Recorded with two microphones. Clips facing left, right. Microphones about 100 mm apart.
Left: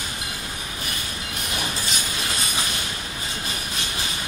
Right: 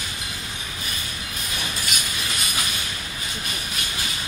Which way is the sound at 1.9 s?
30° left (ahead or behind).